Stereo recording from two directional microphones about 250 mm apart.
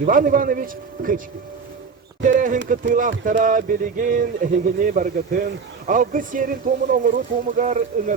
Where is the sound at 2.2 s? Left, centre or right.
Right.